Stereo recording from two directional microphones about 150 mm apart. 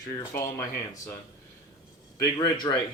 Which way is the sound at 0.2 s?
15° left (ahead or behind).